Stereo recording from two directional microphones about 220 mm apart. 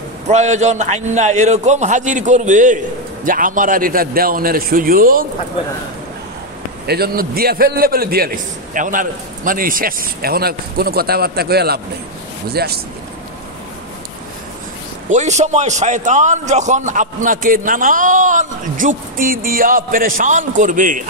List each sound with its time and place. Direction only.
0.3 s a man's voice: 30° right (ahead or behind)
6.9 s a man's voice: 45° right (ahead or behind)
15.0 s a man's voice: 30° right (ahead or behind)